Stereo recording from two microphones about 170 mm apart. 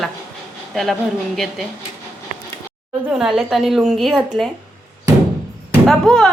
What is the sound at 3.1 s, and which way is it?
A child's voice, centre (ahead or behind).